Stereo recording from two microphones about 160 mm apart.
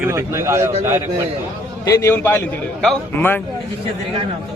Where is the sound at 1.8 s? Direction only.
20° left (ahead or behind).